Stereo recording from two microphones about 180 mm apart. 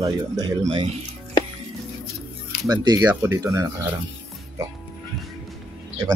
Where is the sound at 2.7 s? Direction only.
25° right (ahead or behind).